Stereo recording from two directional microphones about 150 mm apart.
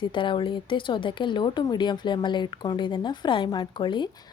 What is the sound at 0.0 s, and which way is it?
A woman's voice, 35° left (ahead or behind).